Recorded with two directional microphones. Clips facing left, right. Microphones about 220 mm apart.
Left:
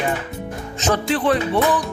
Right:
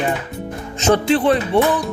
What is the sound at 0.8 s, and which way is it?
Speech, 25° right (ahead or behind).